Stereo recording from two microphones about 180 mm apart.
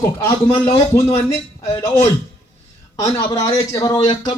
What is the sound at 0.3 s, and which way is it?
A man's voice, 15° left (ahead or behind).